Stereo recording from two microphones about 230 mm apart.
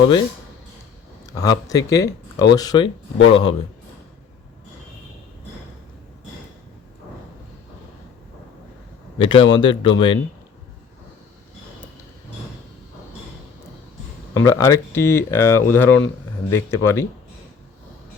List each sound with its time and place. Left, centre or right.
0.0 s speech: centre
1.3 s speech: centre
9.1 s speech: left
14.3 s speech: centre